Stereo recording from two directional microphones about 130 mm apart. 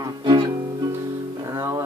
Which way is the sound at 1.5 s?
20° right (ahead or behind).